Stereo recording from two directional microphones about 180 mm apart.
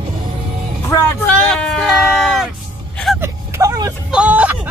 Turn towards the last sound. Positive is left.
turn(degrees=-10)  # may be behind; listen again after turning